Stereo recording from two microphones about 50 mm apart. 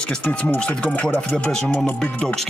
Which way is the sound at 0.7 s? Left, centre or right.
Left.